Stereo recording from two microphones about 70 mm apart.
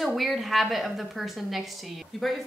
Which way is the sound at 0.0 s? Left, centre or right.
Centre.